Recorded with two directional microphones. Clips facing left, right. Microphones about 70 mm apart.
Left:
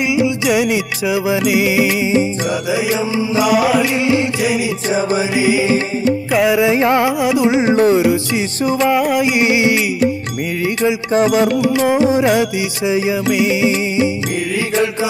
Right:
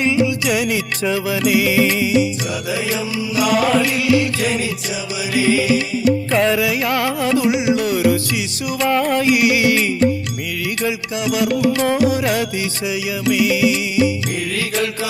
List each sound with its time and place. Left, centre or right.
0.0 s music: centre
3.9 s music: left
4.4 s music: centre
4.8 s music: left
5.4 s music: centre
6.6 s music: left
7.5 s music: left
8.8 s music: centre
9.3 s music: left
11.1 s music: left
14.7 s music: left